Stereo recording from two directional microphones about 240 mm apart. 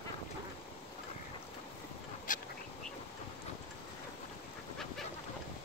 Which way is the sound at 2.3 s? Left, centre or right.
Left.